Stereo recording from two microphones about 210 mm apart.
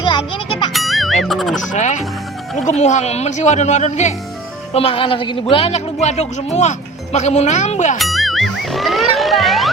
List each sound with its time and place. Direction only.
0.0 s music: 20° left (ahead or behind)
0.7 s music: centre (ahead or behind)
1.7 s speech: 35° left (ahead or behind)
7.9 s music: centre (ahead or behind)